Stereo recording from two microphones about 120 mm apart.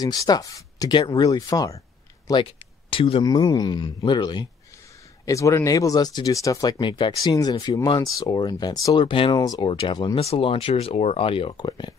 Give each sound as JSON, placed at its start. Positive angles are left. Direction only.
{"t": 0.0, "sound": "speech", "side_deg": 30}
{"t": 2.9, "sound": "speech", "side_deg": 45}
{"t": 3.3, "sound": "speech", "side_deg": 35}
{"t": 5.2, "sound": "speech", "side_deg": 25}
{"t": 9.0, "sound": "speech", "side_deg": 45}
{"t": 10.1, "sound": "speech", "side_deg": 50}